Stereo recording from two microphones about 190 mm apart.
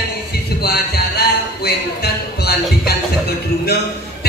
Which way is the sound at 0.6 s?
55° left (ahead or behind).